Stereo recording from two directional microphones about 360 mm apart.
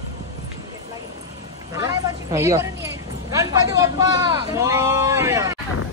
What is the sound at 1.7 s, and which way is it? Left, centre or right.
Speech, centre.